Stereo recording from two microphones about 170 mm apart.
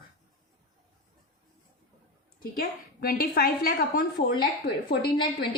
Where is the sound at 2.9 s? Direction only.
60° left (ahead or behind).